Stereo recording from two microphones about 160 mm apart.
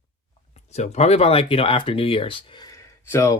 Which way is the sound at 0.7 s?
45° left (ahead or behind).